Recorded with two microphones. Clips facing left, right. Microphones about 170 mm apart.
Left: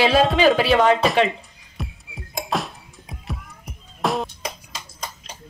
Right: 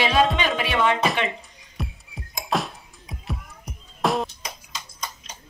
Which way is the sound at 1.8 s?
Centre (ahead or behind).